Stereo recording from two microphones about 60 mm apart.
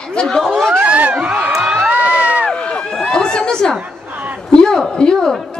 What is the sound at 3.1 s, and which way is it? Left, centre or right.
Chatter, centre.